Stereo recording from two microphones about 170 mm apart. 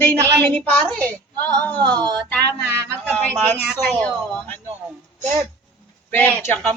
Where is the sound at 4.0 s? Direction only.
10° left (ahead or behind).